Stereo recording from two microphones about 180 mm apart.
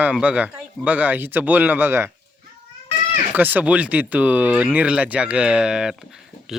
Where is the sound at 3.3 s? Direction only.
10° right (ahead or behind).